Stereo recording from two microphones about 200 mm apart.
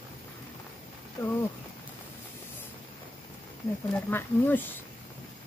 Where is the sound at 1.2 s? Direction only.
15° left (ahead or behind).